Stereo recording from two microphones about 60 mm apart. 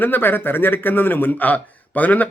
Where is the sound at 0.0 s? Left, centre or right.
Left.